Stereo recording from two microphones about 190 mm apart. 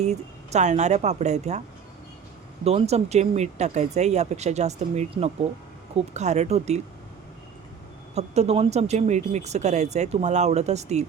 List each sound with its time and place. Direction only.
0.0 s speech: 35° right (ahead or behind)
2.6 s speech: 35° right (ahead or behind)
8.1 s speech: 35° right (ahead or behind)